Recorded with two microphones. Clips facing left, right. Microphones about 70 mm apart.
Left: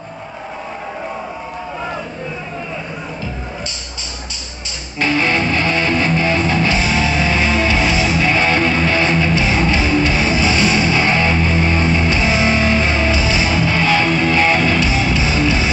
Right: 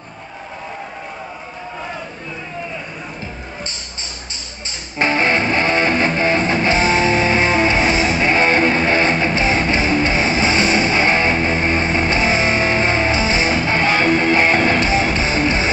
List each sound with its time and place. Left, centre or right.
4.9 s music: right